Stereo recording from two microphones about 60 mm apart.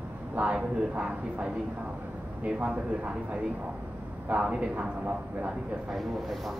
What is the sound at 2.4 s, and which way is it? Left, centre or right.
Speech, right.